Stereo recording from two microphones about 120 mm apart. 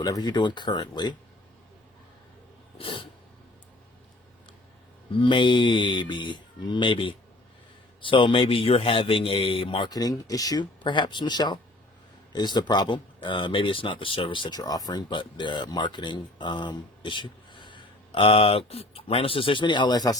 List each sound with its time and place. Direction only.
0.0 s speech: 35° left (ahead or behind)
2.7 s a sound: 50° left (ahead or behind)
5.2 s speech: 40° left (ahead or behind)
9.9 s speech: 30° left (ahead or behind)